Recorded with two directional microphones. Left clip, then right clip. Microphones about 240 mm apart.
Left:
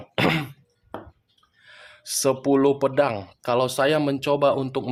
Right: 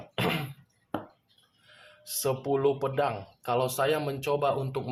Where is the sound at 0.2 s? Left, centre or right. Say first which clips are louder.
Left 8 dB; left.